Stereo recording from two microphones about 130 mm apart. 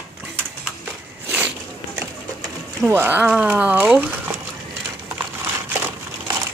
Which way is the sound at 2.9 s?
15° right (ahead or behind).